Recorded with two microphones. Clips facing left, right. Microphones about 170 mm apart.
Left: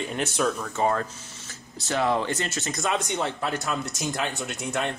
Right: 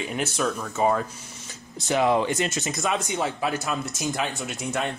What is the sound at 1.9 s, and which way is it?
Speech, 15° right (ahead or behind).